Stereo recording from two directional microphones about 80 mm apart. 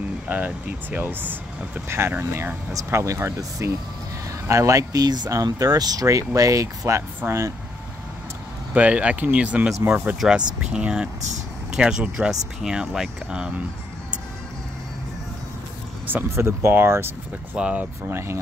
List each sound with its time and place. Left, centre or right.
0.3 s speech: right
2.7 s speech: right
7.2 s speech: right
8.7 s speech: centre
10.2 s speech: centre
16.3 s speech: right
17.6 s speech: centre
18.0 s speech: right